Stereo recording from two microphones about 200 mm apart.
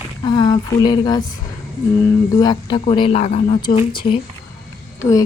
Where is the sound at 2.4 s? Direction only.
25° left (ahead or behind).